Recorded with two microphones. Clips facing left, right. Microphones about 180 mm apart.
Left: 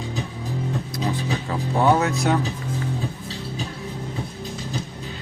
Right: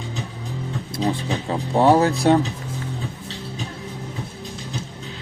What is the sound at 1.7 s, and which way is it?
Speech, 30° right (ahead or behind).